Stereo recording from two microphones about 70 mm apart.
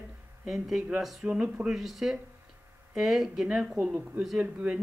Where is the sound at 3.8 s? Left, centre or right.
Centre.